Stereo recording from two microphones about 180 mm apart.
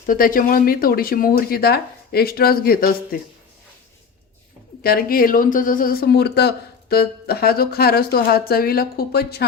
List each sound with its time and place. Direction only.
0.0 s speech: 50° left (ahead or behind)
4.8 s speech: 55° left (ahead or behind)